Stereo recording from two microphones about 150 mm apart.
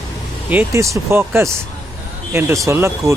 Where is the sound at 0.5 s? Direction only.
15° right (ahead or behind).